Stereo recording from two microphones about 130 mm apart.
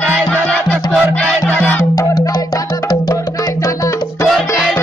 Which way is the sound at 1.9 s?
25° left (ahead or behind).